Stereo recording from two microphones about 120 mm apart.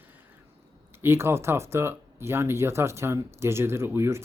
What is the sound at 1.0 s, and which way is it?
Speech, 20° right (ahead or behind).